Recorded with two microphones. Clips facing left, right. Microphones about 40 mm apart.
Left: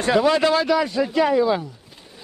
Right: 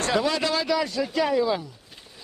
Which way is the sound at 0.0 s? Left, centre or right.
Centre.